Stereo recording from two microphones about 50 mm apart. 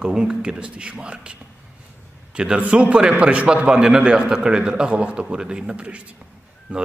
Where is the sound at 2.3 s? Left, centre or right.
Right.